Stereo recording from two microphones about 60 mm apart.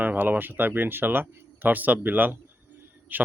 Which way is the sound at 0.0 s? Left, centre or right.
Right.